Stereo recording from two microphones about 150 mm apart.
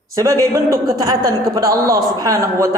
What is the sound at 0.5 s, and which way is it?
A man's voice, 25° right (ahead or behind).